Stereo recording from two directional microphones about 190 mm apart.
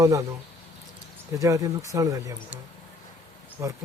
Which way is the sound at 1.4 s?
15° right (ahead or behind).